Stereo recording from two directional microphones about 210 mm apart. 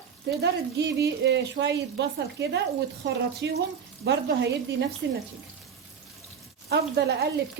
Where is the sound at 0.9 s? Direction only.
55° right (ahead or behind).